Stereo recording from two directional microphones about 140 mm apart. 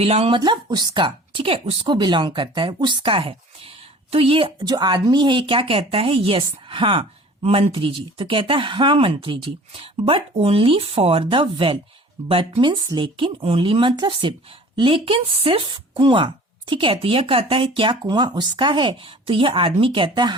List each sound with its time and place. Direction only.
0.0 s a woman's voice: 45° right (ahead or behind)
0.3 s speech: 35° right (ahead or behind)